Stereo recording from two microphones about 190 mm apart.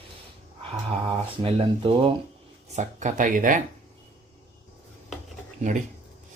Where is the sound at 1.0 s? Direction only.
30° right (ahead or behind).